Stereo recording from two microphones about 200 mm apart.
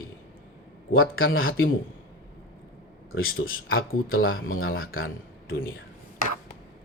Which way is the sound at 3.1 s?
90° left.